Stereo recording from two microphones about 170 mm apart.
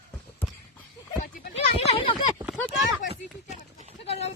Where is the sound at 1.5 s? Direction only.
35° left (ahead or behind).